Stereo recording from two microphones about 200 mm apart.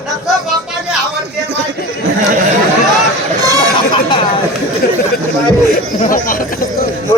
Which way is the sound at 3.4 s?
20° right (ahead or behind).